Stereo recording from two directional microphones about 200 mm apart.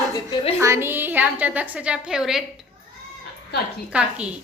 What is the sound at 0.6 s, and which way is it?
A woman's voice, 15° right (ahead or behind).